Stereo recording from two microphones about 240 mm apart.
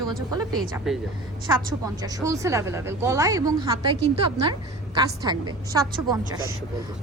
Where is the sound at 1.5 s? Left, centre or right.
Centre.